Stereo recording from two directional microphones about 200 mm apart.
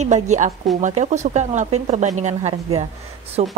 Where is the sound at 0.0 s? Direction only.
35° right (ahead or behind).